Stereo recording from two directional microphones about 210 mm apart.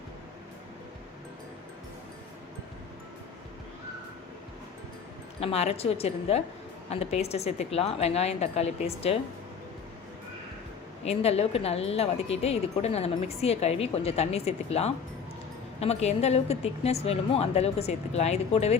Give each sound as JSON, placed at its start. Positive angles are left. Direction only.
{"t": 5.4, "sound": "speech", "side_deg": 30}
{"t": 11.0, "sound": "a woman's voice", "side_deg": 30}